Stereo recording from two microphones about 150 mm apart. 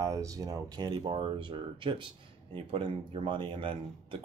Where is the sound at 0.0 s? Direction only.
20° right (ahead or behind).